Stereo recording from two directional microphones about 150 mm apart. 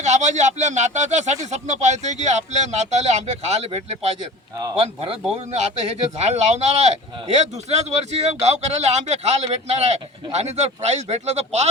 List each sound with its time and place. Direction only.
0.0 s speech: 50° right (ahead or behind)